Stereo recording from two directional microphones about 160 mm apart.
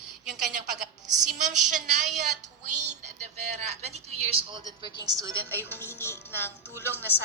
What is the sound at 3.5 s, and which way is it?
A woman's voice, 40° right (ahead or behind).